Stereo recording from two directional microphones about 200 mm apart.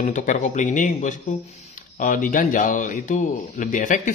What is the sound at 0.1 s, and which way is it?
Speech, 40° left (ahead or behind).